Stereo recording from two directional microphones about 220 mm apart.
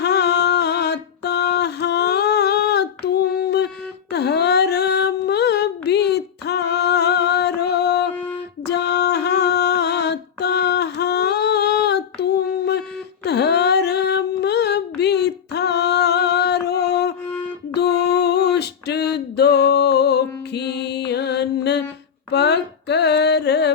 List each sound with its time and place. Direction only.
0.0 s a sound: 50° left (ahead or behind)
17.7 s music: 50° left (ahead or behind)
22.3 s mantra: 50° left (ahead or behind)